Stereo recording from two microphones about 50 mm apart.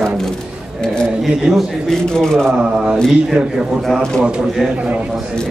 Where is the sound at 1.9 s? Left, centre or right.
Centre.